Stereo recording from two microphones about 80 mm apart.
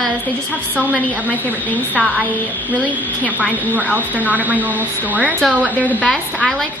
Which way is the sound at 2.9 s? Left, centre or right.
Centre.